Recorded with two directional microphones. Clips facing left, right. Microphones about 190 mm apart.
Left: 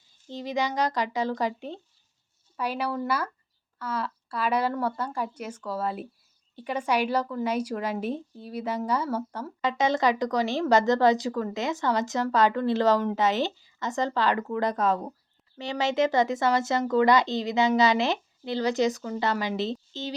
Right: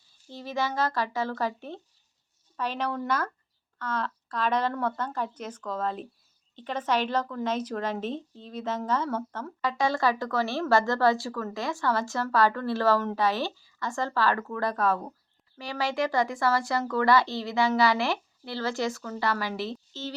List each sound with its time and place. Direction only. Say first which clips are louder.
0.3 s a woman's voice: left 2 dB; 15° left (ahead or behind)
9.6 s speech: left 2 dB; 20° left (ahead or behind)